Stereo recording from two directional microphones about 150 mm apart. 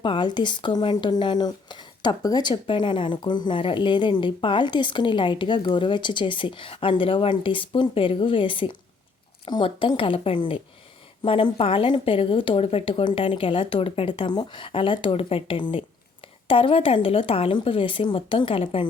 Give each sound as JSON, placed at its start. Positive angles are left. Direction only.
{"t": 0.0, "sound": "speech", "side_deg": 30}